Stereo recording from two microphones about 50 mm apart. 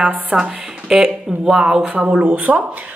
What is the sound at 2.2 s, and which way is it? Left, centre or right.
Speech, right.